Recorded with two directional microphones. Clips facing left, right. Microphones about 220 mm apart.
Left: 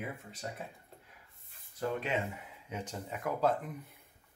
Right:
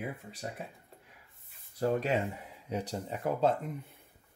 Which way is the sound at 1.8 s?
35° right (ahead or behind).